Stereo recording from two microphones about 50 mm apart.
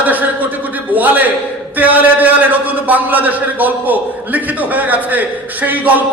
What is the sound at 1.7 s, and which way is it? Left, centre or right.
A man's voice, right.